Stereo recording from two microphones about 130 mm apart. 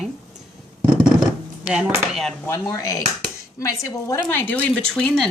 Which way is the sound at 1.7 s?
5° right (ahead or behind).